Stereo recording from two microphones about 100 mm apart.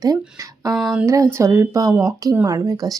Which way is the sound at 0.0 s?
40° right (ahead or behind).